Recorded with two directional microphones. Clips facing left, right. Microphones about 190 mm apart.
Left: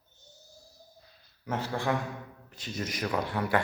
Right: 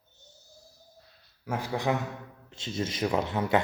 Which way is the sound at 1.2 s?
5° right (ahead or behind).